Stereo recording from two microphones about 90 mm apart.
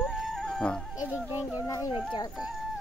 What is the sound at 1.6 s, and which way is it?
Speech, 40° left (ahead or behind).